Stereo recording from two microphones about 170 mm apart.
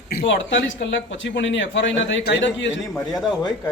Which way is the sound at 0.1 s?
75° left (ahead or behind).